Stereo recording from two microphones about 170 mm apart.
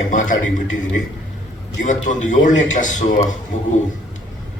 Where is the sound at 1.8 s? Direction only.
50° left (ahead or behind).